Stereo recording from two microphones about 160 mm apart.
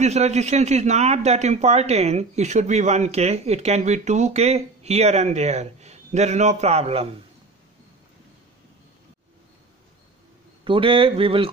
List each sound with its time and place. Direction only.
0.0 s speech: 45° right (ahead or behind)
10.6 s speech: 35° right (ahead or behind)